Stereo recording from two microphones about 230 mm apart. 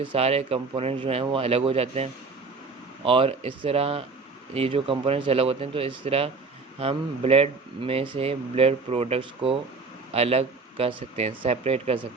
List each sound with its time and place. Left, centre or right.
0.0 s speech: right